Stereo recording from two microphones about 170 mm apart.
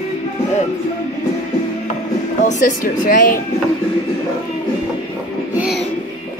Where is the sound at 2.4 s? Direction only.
55° left (ahead or behind).